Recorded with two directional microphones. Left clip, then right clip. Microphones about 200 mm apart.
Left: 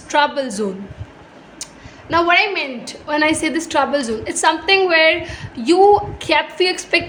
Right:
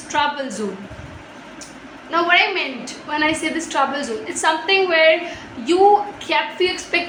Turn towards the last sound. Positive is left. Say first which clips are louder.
# left 3 dB
turn(degrees=55)  # may be behind; listen again after turning